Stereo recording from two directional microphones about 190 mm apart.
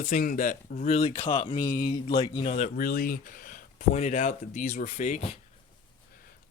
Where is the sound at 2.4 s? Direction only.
40° left (ahead or behind).